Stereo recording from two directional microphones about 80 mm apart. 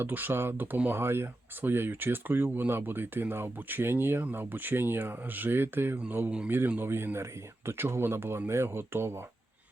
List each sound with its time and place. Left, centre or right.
0.0 s speech: right